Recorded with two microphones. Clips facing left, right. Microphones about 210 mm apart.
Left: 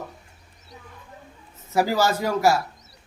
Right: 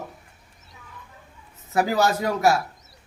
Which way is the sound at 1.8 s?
Centre (ahead or behind).